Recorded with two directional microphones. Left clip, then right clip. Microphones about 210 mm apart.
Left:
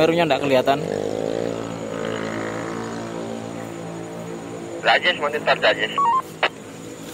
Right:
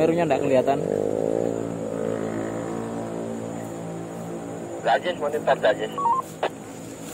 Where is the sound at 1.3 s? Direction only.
30° right (ahead or behind).